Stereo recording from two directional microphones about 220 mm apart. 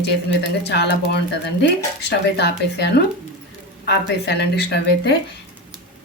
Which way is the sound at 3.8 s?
50° left (ahead or behind).